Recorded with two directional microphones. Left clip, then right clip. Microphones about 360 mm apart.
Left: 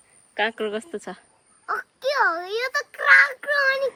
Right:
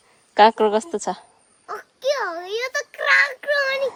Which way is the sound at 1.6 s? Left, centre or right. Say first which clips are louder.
Right 1 dB; centre.